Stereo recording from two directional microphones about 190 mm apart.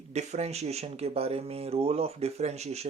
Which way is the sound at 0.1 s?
35° right (ahead or behind).